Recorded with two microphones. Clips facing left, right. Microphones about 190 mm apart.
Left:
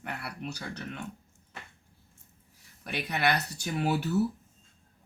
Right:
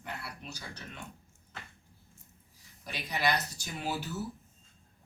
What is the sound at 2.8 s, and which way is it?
Speech, 60° left (ahead or behind).